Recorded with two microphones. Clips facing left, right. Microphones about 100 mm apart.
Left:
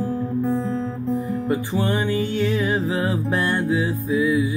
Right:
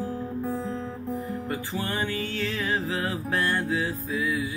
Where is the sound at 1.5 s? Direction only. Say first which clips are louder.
Left 10 dB; 20° left (ahead or behind).